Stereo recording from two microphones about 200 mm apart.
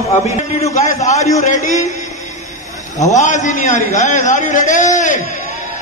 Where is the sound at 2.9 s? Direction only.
35° left (ahead or behind).